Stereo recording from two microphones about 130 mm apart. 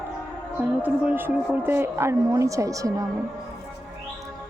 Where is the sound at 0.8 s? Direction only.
15° right (ahead or behind).